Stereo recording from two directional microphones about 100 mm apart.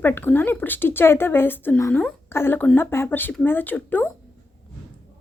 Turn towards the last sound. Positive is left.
turn(degrees=20)  # may be behind; listen again after turning